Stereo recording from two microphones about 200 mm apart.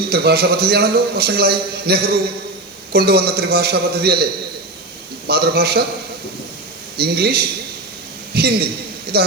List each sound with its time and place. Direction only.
0.1 s a man's voice: 50° right (ahead or behind)
5.3 s a man's voice: 50° right (ahead or behind)
6.9 s a man's voice: 50° right (ahead or behind)